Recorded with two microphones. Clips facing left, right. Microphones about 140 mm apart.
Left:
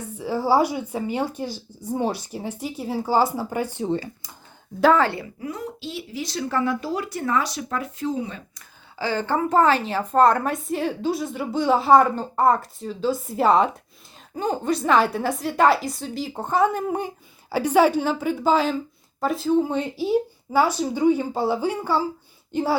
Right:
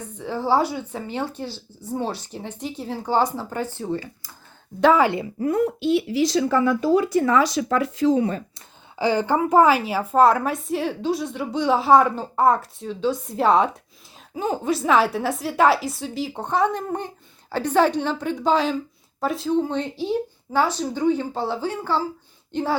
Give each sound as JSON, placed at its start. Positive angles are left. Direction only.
{"t": 0.2, "sound": "speech", "side_deg": 10}
{"t": 4.9, "sound": "speech", "side_deg": -15}
{"t": 5.4, "sound": "speech", "side_deg": -55}
{"t": 7.3, "sound": "speech", "side_deg": -90}
{"t": 9.0, "sound": "a woman's voice", "side_deg": -15}